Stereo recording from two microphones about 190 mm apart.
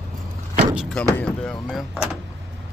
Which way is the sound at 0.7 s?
5° right (ahead or behind).